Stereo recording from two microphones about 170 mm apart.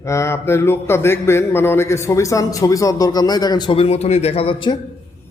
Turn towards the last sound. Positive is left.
turn(degrees=30)  # may be behind; listen again after turning